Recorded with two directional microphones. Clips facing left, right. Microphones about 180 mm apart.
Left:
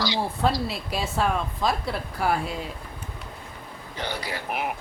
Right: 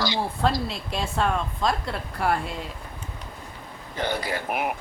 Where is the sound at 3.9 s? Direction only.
50° right (ahead or behind).